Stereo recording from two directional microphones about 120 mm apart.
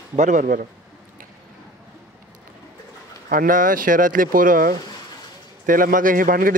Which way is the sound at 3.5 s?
90° right.